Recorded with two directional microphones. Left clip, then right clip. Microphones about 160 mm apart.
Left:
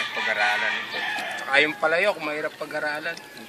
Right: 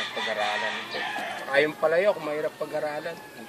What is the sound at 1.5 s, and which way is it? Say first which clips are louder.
Speech: left 2 dB; 10° right (ahead or behind).